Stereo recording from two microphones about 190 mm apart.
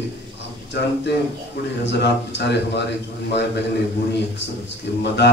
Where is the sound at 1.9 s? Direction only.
65° left (ahead or behind).